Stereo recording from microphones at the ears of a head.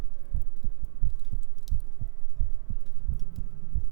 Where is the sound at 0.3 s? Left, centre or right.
Right.